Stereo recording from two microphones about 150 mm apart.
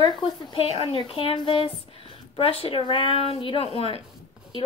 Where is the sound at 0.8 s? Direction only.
35° left (ahead or behind).